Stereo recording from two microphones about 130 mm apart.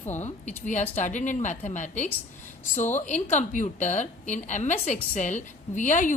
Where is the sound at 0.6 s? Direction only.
65° left (ahead or behind).